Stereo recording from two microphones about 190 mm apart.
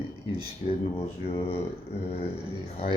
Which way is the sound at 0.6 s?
40° left (ahead or behind).